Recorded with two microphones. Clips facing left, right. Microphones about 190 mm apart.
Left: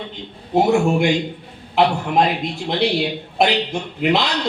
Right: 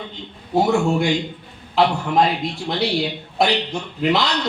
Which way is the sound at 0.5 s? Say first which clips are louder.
Left 2 dB; 20° left (ahead or behind).